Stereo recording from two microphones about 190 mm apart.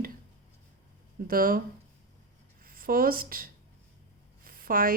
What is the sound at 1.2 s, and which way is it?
Speech, 50° right (ahead or behind).